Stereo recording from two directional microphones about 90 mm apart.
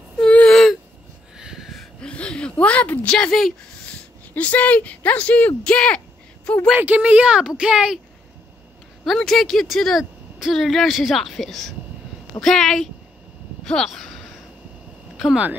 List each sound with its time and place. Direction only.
0.2 s whimper: 10° left (ahead or behind)
1.4 s a sound: 5° right (ahead or behind)
2.0 s a sound: 10° left (ahead or behind)
2.5 s speech: 15° left (ahead or behind)
3.2 s speech: 5° left (ahead or behind)
4.3 s speech: 15° left (ahead or behind)
6.8 s speech: 15° right (ahead or behind)
9.0 s speech: 5° left (ahead or behind)